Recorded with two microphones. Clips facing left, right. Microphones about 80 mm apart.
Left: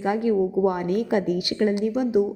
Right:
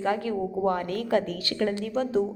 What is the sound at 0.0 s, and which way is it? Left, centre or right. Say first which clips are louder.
A woman's voice: left 5 dB; centre.